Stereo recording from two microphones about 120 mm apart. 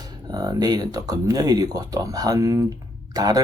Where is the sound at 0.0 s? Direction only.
35° right (ahead or behind).